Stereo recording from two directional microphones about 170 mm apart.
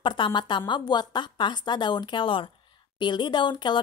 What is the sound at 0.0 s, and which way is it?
Speech, 30° left (ahead or behind).